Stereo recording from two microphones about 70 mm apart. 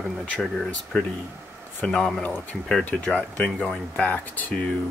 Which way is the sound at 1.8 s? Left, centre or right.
Centre.